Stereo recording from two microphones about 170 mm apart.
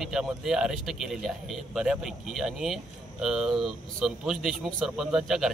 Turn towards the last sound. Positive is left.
turn(degrees=0)  # may be behind; listen again after turning